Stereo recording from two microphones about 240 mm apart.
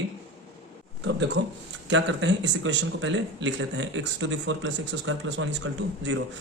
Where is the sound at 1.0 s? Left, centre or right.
Right.